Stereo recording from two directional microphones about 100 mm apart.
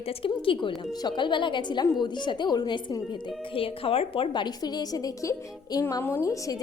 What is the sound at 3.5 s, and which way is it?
A woman's voice, 65° left (ahead or behind).